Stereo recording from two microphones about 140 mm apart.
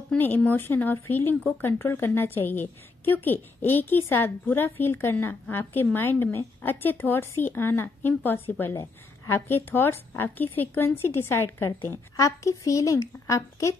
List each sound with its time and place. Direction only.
0.1 s speech: 10° left (ahead or behind)